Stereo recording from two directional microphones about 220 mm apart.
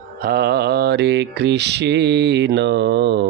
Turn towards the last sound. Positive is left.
turn(degrees=-50)  # may be behind; listen again after turning